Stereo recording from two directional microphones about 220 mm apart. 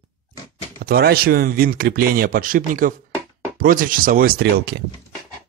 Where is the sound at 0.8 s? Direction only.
45° right (ahead or behind).